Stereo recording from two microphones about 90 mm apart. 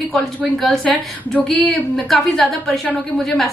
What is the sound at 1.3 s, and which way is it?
A woman's voice, centre (ahead or behind).